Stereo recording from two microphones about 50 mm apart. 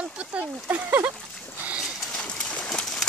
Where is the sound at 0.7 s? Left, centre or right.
Right.